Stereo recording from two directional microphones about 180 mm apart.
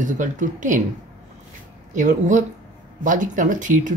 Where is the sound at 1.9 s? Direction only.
45° right (ahead or behind).